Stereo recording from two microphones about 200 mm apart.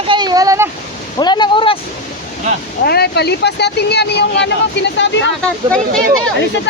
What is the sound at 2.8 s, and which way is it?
Speech, 55° left (ahead or behind).